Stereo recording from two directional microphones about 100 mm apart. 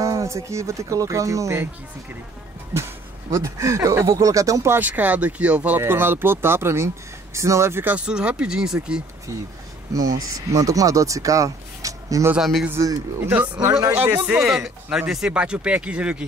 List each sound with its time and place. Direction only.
0.0 s speech: 30° right (ahead or behind)
2.7 s speech: 30° right (ahead or behind)
4.7 s speech: 15° right (ahead or behind)
9.9 s speech: 35° right (ahead or behind)
12.4 s speech: centre (ahead or behind)
12.7 s speech: 35° right (ahead or behind)
14.1 s speech: 15° right (ahead or behind)